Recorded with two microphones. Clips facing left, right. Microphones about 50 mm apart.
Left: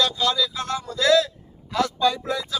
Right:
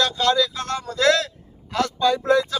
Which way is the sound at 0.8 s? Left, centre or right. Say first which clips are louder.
Even; right.